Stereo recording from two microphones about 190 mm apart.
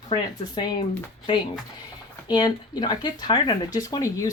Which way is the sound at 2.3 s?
20° left (ahead or behind).